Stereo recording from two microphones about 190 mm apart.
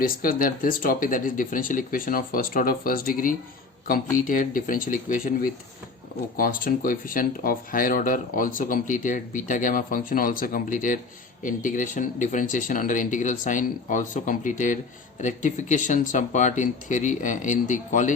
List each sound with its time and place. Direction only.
0.0 s speech: 50° left (ahead or behind)